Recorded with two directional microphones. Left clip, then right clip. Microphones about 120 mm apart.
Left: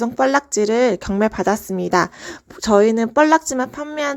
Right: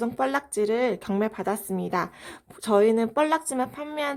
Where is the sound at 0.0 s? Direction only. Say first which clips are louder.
Left 9 dB; 45° left (ahead or behind).